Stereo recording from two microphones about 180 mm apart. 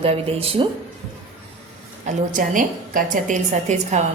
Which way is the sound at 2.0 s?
50° right (ahead or behind).